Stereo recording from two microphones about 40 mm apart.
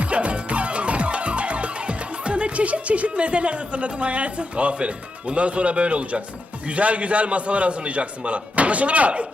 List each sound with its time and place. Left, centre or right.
0.0 s music: right
6.7 s a man's voice: right